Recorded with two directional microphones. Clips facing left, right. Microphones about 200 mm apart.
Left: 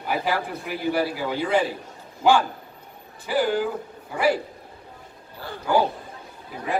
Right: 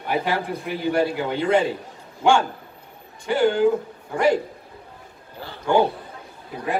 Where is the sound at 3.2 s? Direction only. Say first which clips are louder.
Right 3 dB; 5° left (ahead or behind).